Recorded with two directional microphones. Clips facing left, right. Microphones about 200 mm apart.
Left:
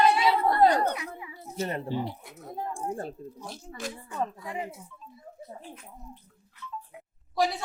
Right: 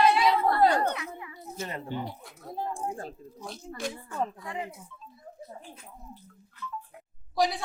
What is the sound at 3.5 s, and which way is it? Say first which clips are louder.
A capella: right 5 dB; 5° left (ahead or behind).